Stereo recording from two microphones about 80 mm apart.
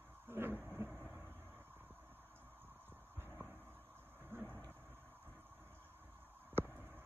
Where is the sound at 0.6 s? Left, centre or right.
Right.